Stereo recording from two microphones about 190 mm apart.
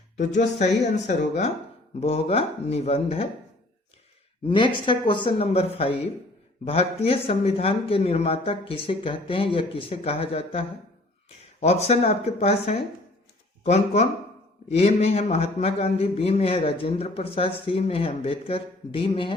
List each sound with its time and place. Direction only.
0.2 s a man's voice: 40° left (ahead or behind)
4.4 s a man's voice: 25° left (ahead or behind)